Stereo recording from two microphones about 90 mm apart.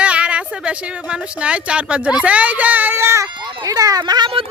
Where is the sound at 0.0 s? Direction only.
15° right (ahead or behind); by 3.2 s 30° right (ahead or behind).